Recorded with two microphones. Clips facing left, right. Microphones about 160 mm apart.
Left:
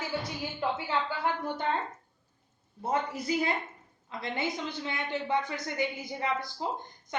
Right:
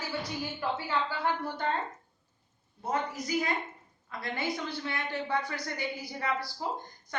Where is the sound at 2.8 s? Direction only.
30° left (ahead or behind).